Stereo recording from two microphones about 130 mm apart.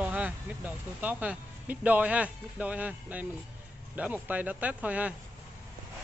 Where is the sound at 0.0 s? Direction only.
10° right (ahead or behind).